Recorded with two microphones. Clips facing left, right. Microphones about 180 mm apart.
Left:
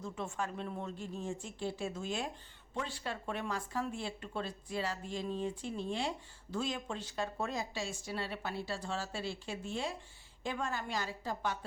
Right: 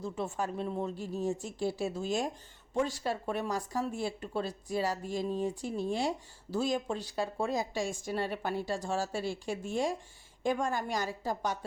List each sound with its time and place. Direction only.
0.0 s speech: 35° right (ahead or behind)
10.4 s a woman's voice: 45° right (ahead or behind)